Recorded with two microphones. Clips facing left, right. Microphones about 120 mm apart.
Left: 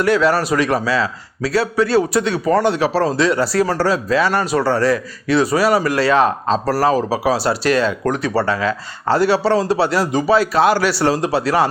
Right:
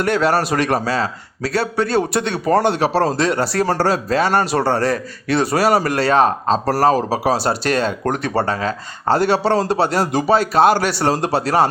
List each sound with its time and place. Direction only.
0.0 s a man's voice: 55° right (ahead or behind)
4.3 s speech: 30° right (ahead or behind)
4.8 s a man's voice: 55° right (ahead or behind)